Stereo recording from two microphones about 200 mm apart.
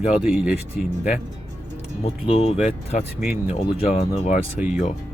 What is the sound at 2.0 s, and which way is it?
Speech, 30° left (ahead or behind).